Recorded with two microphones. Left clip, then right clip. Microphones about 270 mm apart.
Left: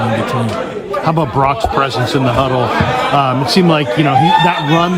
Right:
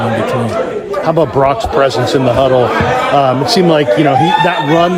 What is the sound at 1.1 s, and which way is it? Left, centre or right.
A man's voice, centre.